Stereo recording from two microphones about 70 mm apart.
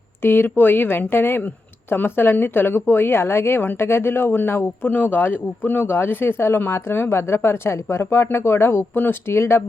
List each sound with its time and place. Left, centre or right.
0.2 s speech: left